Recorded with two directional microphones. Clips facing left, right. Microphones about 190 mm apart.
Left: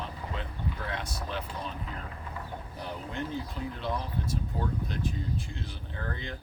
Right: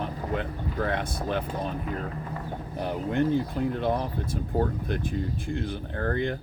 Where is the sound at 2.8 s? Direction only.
60° right (ahead or behind).